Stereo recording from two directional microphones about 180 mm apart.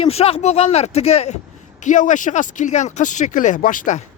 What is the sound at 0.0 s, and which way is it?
Speech, 35° left (ahead or behind).